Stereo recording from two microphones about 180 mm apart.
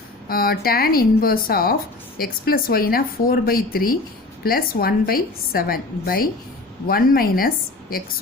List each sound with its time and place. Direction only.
0.3 s speech: 55° left (ahead or behind)